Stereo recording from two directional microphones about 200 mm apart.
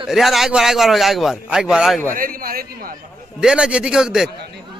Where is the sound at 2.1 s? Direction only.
45° right (ahead or behind).